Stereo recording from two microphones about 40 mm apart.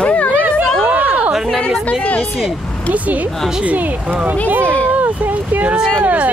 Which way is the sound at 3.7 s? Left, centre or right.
Right.